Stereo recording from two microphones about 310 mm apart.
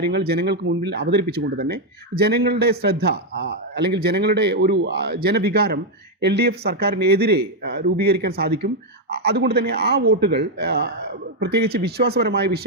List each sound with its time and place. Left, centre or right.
0.0 s a man's voice: right